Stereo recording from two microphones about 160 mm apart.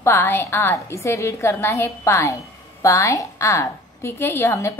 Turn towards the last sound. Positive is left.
turn(degrees=15)  # may be behind; listen again after turning